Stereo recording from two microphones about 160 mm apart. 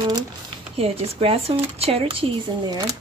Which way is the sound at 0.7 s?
35° right (ahead or behind).